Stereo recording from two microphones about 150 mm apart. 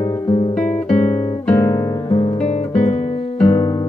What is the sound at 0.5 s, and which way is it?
Guitar, 50° left (ahead or behind).